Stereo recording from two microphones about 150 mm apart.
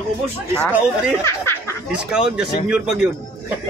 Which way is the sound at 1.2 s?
20° left (ahead or behind).